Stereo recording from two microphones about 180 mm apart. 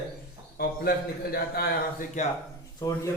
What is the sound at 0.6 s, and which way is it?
A man's voice, 60° left (ahead or behind).